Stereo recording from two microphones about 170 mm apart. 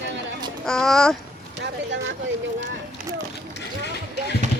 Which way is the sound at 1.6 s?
90° right.